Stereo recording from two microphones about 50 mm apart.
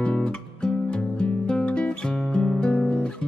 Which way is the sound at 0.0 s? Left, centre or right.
Left.